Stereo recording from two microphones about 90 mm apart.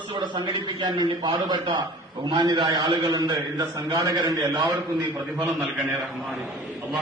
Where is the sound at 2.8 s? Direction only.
55° right (ahead or behind).